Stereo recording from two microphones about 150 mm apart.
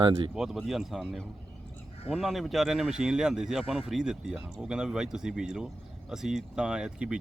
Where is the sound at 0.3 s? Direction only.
5° right (ahead or behind).